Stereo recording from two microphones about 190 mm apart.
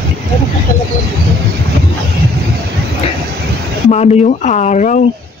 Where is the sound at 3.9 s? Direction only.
35° left (ahead or behind).